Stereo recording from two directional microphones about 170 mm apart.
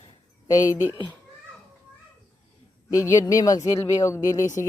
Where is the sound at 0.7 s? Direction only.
10° right (ahead or behind).